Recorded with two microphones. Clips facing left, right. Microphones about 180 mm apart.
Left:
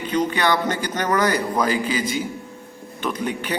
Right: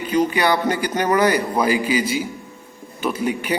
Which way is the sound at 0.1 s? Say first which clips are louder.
Right 2 dB; 10° right (ahead or behind).